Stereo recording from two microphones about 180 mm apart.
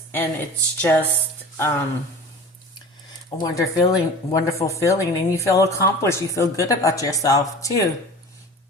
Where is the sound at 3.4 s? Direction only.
20° left (ahead or behind).